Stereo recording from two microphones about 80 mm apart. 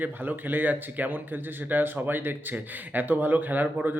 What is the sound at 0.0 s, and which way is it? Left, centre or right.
A man's voice, right.